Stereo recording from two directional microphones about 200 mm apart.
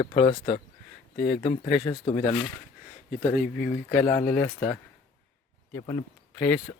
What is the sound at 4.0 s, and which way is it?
Speech, 25° left (ahead or behind).